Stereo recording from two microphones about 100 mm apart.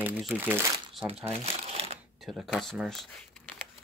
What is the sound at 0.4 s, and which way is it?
Speech, 20° right (ahead or behind).